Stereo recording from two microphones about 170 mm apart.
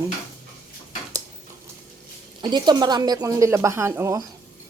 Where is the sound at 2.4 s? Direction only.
25° right (ahead or behind).